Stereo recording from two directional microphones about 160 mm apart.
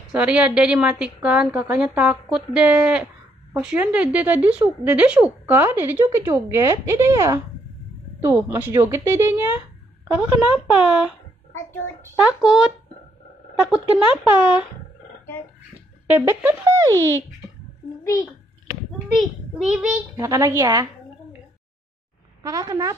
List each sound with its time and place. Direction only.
0.1 s a woman's voice: 5° right (ahead or behind)
10.7 s speech: 5° right (ahead or behind)
11.5 s a child's voice: 15° left (ahead or behind)
12.2 s speech: 5° right (ahead or behind)
16.1 s a woman's voice: 10° right (ahead or behind)
19.1 s speech: 5° right (ahead or behind)
20.2 s a woman's voice: 20° right (ahead or behind)
22.4 s a woman's voice: 25° right (ahead or behind)